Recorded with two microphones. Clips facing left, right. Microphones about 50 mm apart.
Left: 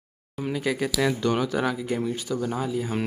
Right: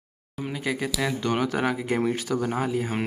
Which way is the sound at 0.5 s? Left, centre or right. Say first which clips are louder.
Left 2 dB; centre.